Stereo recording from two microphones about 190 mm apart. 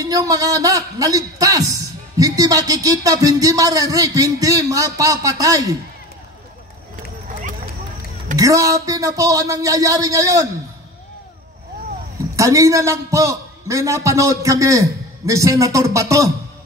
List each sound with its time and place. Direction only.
0.0 s a man's voice: 20° right (ahead or behind)
8.4 s a man's voice: 20° right (ahead or behind)
12.4 s a man's voice: 15° right (ahead or behind)